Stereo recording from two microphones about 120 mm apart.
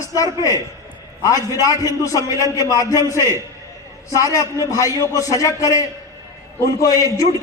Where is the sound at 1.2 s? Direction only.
30° left (ahead or behind).